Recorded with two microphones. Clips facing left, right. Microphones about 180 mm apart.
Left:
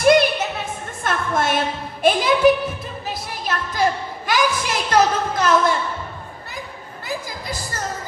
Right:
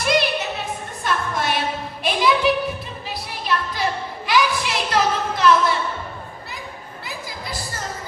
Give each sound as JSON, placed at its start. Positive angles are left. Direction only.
{"t": 0.0, "sound": "music", "side_deg": 50}
{"t": 1.0, "sound": "a sound", "side_deg": 50}
{"t": 7.0, "sound": "music", "side_deg": 45}